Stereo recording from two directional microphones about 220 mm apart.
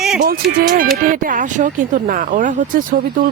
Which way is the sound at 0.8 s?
40° right (ahead or behind).